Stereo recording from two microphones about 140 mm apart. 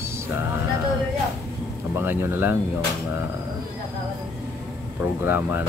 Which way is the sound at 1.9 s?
15° right (ahead or behind).